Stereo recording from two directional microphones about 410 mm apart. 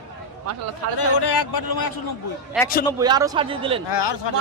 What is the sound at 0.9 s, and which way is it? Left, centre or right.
A man's voice, left.